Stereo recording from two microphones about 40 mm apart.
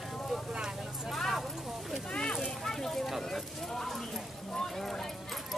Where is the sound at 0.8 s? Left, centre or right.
Centre.